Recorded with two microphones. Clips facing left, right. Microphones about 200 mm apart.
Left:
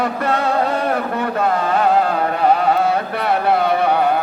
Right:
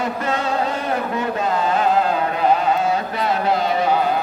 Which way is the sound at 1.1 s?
55° left (ahead or behind).